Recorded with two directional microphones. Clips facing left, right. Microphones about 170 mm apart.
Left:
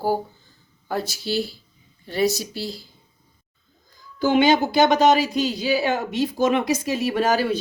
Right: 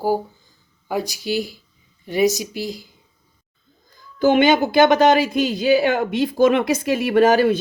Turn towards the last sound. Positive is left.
turn(degrees=-55)  # may be behind; listen again after turning